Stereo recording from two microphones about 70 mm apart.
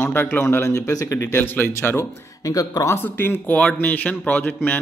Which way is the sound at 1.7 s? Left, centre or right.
Left.